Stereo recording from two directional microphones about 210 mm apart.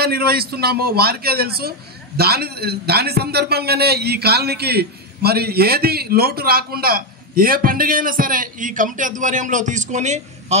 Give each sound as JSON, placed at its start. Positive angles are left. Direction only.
{"t": 0.0, "sound": "a man's voice", "side_deg": -45}